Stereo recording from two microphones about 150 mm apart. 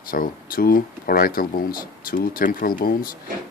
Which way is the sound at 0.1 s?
70° left (ahead or behind).